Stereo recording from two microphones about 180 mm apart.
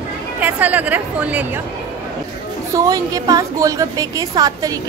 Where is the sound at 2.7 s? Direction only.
20° right (ahead or behind).